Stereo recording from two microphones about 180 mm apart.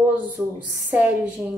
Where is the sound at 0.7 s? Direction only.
10° right (ahead or behind).